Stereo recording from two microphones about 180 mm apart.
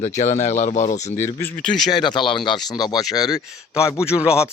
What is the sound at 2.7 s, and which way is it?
Speech, 20° left (ahead or behind).